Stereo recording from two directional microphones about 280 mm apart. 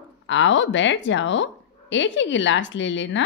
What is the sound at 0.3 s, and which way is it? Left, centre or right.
A woman's voice, left.